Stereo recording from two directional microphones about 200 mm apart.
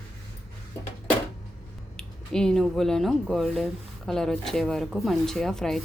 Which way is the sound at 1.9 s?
5° left (ahead or behind).